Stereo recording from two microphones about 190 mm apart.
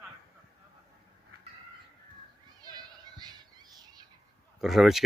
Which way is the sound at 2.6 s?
20° right (ahead or behind).